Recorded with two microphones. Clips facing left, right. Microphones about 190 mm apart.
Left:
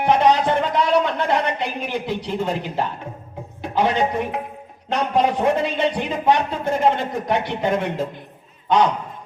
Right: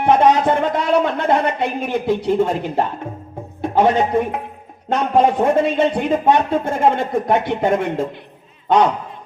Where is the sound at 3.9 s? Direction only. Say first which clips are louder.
Right 4 dB; 30° right (ahead or behind).